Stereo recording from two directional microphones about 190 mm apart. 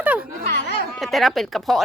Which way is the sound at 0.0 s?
5° right (ahead or behind).